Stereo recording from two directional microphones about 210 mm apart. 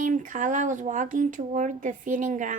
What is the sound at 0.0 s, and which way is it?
Speech, 40° right (ahead or behind).